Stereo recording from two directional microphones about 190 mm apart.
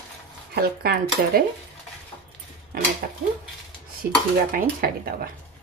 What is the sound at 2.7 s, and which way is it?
Speech, 50° right (ahead or behind).